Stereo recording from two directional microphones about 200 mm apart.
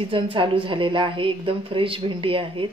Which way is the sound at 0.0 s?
25° right (ahead or behind).